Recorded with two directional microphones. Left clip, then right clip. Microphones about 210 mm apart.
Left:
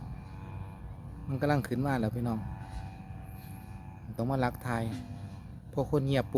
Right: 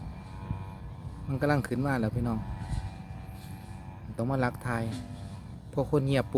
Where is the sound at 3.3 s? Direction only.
40° right (ahead or behind).